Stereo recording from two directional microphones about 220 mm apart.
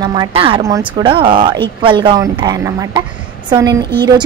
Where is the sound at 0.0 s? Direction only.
20° right (ahead or behind).